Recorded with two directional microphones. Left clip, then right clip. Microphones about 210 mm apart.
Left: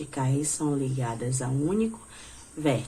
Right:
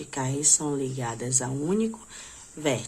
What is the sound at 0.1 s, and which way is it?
Speech, 30° right (ahead or behind).